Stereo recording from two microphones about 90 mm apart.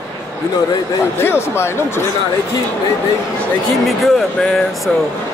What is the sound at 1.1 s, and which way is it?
Speech, 25° left (ahead or behind).